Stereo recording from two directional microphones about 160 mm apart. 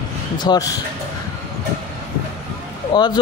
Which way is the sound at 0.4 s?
25° left (ahead or behind).